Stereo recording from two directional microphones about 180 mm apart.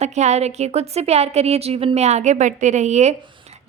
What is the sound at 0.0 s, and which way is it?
Speech, 40° right (ahead or behind).